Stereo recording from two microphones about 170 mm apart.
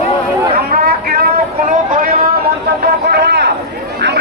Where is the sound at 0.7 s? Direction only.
60° right (ahead or behind).